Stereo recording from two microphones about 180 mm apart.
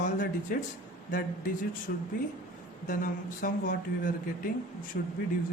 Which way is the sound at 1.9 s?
60° left (ahead or behind).